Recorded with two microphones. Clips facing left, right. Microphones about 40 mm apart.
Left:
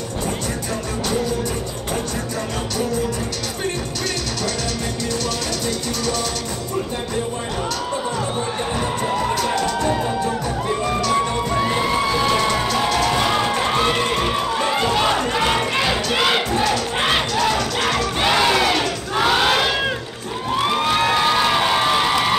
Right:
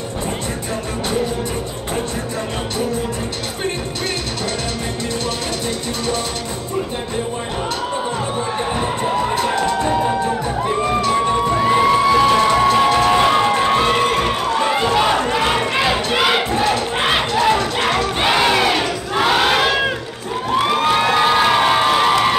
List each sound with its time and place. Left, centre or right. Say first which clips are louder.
8.7 s crowd: right 2 dB; right
9.6 s music: right 3 dB; right
13.6 s crowd: right 4 dB; centre
17.3 s crowd: right 4 dB; right
18.2 s battle cry: right 1 dB; centre
20.5 s crowd: right 3 dB; centre